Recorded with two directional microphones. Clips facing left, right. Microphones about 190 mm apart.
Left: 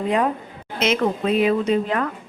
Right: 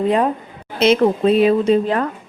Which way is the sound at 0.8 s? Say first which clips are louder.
Right 7 dB; 30° right (ahead or behind).